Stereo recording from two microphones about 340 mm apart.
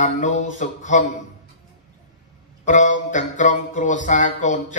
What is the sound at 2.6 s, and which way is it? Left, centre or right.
A man's voice, left.